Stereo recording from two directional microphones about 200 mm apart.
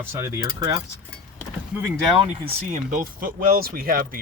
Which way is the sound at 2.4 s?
40° right (ahead or behind).